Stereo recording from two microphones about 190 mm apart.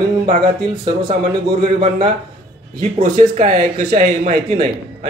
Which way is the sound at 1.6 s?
30° right (ahead or behind).